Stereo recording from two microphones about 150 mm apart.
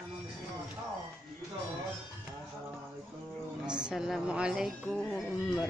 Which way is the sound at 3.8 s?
Centre (ahead or behind).